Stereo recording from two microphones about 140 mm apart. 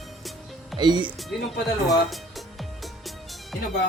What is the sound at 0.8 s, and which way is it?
Speech, 30° right (ahead or behind).